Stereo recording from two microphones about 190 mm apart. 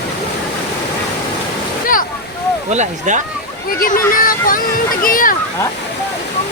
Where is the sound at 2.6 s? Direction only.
35° right (ahead or behind).